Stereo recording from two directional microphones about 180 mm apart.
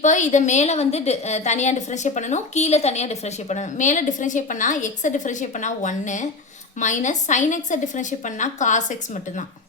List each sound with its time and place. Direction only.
0.0 s a woman's voice: 40° left (ahead or behind)